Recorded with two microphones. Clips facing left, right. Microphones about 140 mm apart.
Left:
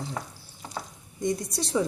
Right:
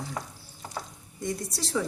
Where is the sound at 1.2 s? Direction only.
20° left (ahead or behind).